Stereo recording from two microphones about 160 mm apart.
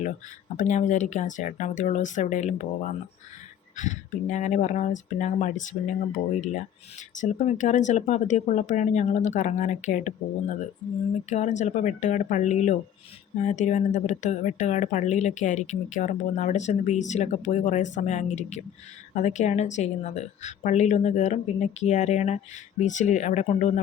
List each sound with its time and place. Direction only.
0.5 s speech: 50° left (ahead or behind)
3.8 s speech: 50° left (ahead or behind)
7.2 s speech: 50° left (ahead or behind)